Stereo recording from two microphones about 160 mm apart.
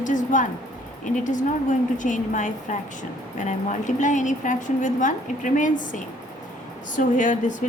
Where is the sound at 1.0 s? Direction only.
50° left (ahead or behind).